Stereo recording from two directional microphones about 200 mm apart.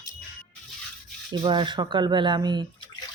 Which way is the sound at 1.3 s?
20° right (ahead or behind).